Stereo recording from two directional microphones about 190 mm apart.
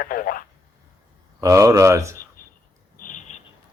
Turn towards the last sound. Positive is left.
turn(degrees=45)  # may be behind; listen again after turning